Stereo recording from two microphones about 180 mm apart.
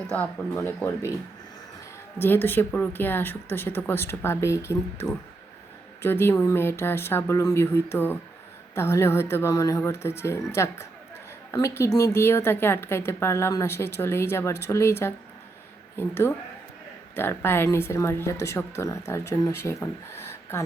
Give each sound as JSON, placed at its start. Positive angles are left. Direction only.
{"t": 0.1, "sound": "a woman's voice", "side_deg": 10}
{"t": 2.1, "sound": "a woman's voice", "side_deg": 10}